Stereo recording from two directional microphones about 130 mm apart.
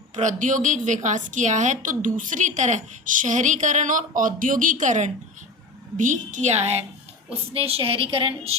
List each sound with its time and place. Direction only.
0.2 s a woman's voice: 75° right (ahead or behind); by 8.5 s 45° right (ahead or behind)